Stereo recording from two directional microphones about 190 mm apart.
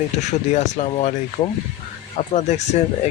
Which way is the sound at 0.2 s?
40° left (ahead or behind).